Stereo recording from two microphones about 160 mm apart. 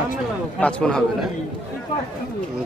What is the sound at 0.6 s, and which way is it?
Speech, 5° left (ahead or behind).